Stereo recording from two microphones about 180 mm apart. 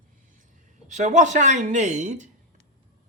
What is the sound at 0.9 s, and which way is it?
Speech, 40° right (ahead or behind).